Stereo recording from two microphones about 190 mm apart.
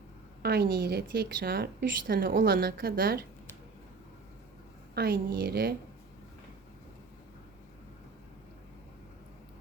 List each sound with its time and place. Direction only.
0.4 s a woman's voice: 55° right (ahead or behind)
4.9 s a woman's voice: 55° right (ahead or behind)